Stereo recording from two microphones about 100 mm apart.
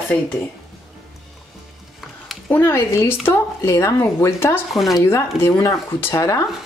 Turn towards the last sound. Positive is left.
turn(degrees=30)  # may be behind; listen again after turning